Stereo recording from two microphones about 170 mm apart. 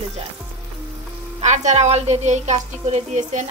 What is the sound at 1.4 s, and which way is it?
A woman's voice, 45° right (ahead or behind).